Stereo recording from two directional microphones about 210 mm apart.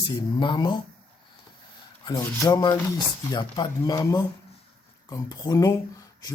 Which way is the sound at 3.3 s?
20° left (ahead or behind).